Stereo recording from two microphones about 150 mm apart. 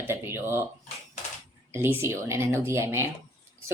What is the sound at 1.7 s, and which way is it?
Speech, 15° right (ahead or behind).